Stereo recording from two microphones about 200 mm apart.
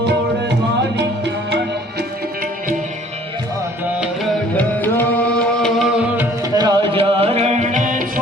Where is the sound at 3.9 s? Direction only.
5° right (ahead or behind).